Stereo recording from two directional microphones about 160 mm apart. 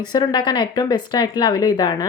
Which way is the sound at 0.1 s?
25° left (ahead or behind).